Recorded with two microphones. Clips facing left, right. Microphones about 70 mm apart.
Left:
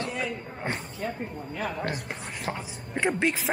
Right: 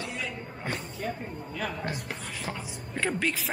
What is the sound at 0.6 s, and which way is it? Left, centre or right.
Speech, left.